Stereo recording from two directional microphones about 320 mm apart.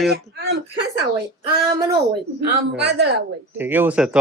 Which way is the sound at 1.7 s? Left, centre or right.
Centre.